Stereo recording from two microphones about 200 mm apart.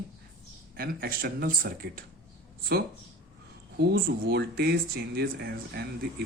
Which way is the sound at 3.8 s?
50° right (ahead or behind).